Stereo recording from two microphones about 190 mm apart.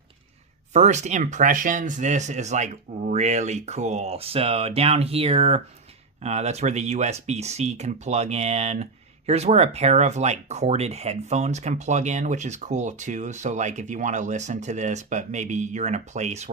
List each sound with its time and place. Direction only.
0.7 s speech: 40° right (ahead or behind)